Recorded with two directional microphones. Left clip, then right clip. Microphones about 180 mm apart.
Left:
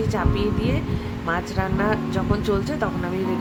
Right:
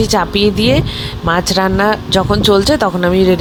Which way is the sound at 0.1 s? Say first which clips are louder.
Right 11 dB; 45° right (ahead or behind).